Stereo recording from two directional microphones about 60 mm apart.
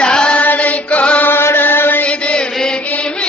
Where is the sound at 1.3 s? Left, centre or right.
Left.